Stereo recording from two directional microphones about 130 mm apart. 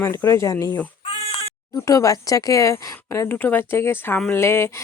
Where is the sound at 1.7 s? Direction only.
25° left (ahead or behind).